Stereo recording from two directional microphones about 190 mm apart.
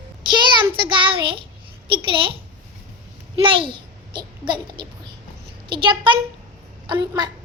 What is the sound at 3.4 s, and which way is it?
A child's voice, 25° right (ahead or behind).